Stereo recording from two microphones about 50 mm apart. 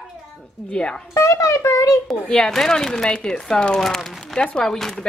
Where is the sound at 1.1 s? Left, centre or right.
Left.